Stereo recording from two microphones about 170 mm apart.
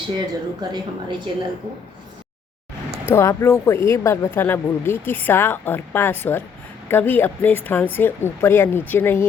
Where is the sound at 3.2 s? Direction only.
15° left (ahead or behind).